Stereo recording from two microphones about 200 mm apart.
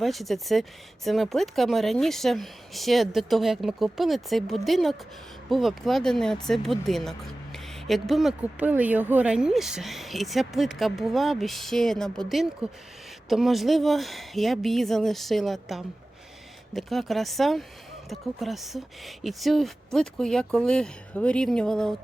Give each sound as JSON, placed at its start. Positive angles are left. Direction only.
{"t": 0.0, "sound": "a woman's voice", "side_deg": 0}